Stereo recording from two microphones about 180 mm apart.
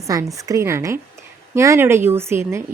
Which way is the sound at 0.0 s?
20° right (ahead or behind).